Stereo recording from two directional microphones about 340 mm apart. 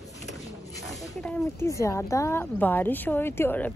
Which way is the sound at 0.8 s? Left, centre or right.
Centre.